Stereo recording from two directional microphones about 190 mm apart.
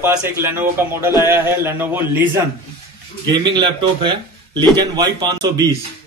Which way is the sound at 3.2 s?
25° right (ahead or behind).